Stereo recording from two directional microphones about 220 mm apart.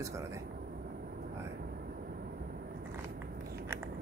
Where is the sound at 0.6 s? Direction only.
40° right (ahead or behind).